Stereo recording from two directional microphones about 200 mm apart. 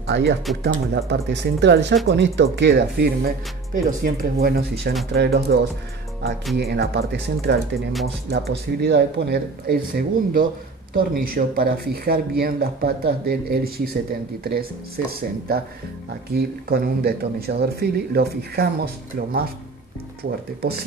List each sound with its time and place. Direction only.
0.0 s speech: 60° right (ahead or behind)